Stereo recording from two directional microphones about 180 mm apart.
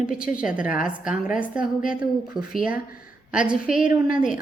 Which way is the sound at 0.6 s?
45° left (ahead or behind).